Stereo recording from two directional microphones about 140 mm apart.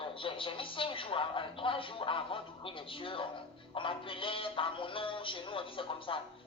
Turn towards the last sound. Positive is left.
turn(degrees=40)  # may be behind; listen again after turning